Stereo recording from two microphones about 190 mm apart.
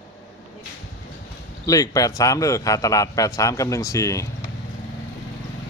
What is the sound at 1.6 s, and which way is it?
A man's voice, 20° left (ahead or behind).